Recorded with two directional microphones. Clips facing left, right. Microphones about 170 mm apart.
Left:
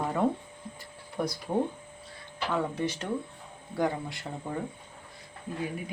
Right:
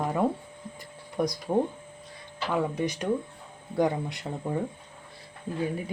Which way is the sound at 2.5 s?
15° right (ahead or behind).